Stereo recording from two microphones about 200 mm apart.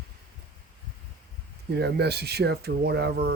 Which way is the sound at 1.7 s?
55° right (ahead or behind).